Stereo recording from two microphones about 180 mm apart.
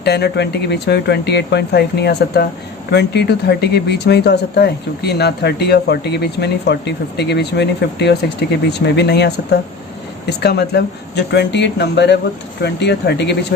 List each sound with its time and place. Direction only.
0.0 s speech: 65° left (ahead or behind)